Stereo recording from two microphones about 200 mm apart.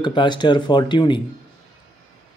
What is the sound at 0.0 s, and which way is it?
Speech, 25° left (ahead or behind).